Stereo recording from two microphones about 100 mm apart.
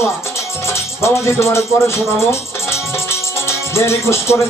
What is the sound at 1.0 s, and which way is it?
Music, 25° left (ahead or behind).